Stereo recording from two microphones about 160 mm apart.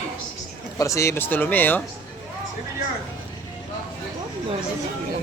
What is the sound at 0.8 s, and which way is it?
Speech, 20° left (ahead or behind).